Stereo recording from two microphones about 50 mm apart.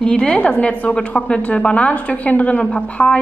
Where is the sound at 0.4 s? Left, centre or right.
Left.